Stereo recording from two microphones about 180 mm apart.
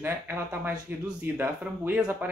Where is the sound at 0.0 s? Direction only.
10° right (ahead or behind).